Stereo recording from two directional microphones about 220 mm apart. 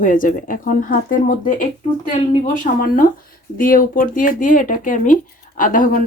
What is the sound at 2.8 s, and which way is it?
Speech, 40° left (ahead or behind).